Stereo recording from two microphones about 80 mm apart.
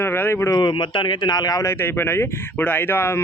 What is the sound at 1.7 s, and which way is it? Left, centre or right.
Speech, left.